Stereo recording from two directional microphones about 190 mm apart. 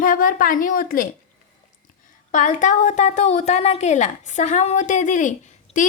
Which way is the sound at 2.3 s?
40° left (ahead or behind).